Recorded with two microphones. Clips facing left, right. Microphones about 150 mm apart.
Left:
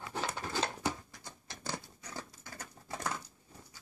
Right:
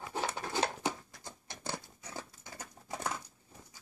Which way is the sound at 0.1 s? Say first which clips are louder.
Right 1 dB; 20° right (ahead or behind).